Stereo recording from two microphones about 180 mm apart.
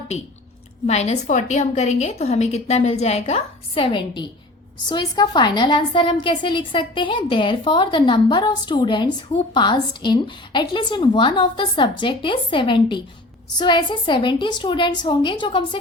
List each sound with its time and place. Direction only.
0.9 s a woman's voice: 40° left (ahead or behind)